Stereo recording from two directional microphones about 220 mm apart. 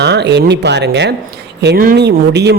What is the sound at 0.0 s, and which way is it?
A man's voice, 50° right (ahead or behind).